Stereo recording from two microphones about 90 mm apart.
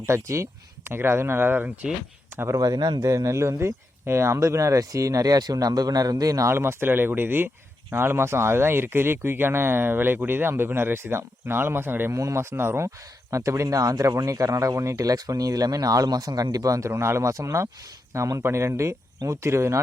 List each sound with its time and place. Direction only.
0.0 s speech: 30° right (ahead or behind)
2.6 s speech: 45° right (ahead or behind); by 19.8 s 30° right (ahead or behind)